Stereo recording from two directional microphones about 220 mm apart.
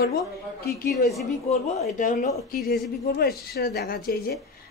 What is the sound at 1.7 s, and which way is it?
Speech, 35° left (ahead or behind).